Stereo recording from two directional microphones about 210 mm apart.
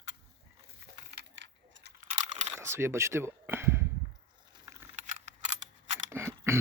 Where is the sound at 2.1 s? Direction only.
35° right (ahead or behind).